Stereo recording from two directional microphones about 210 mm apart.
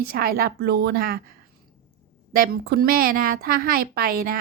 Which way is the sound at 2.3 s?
50° right (ahead or behind).